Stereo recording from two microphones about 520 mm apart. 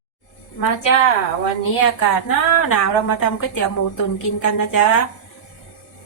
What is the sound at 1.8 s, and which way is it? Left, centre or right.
A woman's voice, left.